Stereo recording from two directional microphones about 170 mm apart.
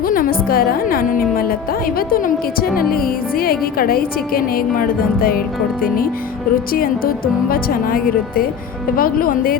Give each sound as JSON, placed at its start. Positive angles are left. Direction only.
{"t": 0.0, "sound": "speech", "side_deg": 55}
{"t": 6.7, "sound": "speech", "side_deg": 60}